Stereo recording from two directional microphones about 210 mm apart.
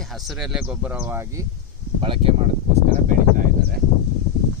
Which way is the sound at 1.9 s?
25° right (ahead or behind).